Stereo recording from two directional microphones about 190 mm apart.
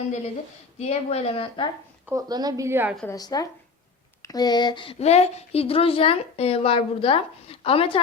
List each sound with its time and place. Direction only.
0.8 s speech: 35° left (ahead or behind)
2.0 s a woman's voice: 20° right (ahead or behind)
3.1 s speech: 20° left (ahead or behind)